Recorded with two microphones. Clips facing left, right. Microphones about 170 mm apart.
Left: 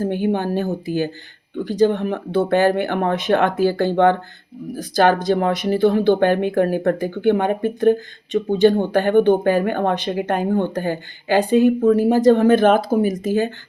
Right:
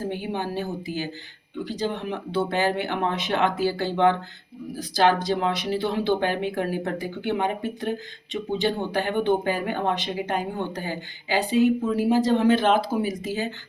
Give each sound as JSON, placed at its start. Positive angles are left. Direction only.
{"t": 0.0, "sound": "speech", "side_deg": 50}